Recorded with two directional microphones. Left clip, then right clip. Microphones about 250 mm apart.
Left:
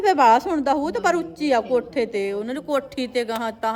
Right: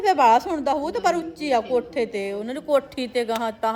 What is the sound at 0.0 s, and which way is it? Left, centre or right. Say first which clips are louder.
A woman's voice: left 1 dB; centre.